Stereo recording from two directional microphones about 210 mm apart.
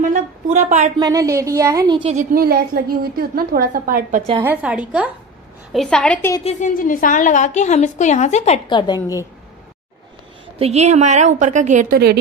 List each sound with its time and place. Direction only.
0.0 s a woman's voice: 40° right (ahead or behind)
0.9 s a woman's voice: 15° right (ahead or behind)
2.1 s a woman's voice: 45° right (ahead or behind)
4.4 s a woman's voice: 10° right (ahead or behind); by 6.4 s 10° left (ahead or behind)
6.4 s a woman's voice: 40° left (ahead or behind); by 9.2 s 20° left (ahead or behind)
10.6 s a woman's voice: 30° right (ahead or behind); by 12.2 s 45° right (ahead or behind)